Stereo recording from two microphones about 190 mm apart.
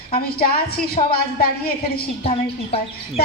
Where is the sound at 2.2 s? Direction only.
30° left (ahead or behind).